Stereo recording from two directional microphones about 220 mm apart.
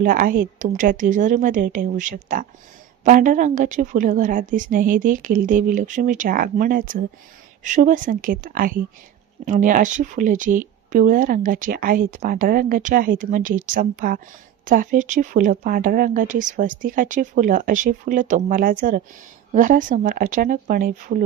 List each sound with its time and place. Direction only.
0.0 s speech: 40° right (ahead or behind)